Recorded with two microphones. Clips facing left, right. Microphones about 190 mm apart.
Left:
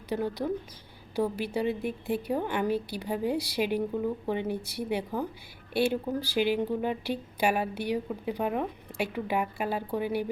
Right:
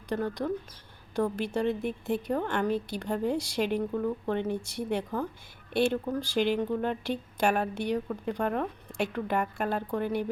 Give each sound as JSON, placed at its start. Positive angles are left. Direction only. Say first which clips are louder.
{"t": 0.1, "sound": "a woman's voice", "louder": "even", "side_deg": 5}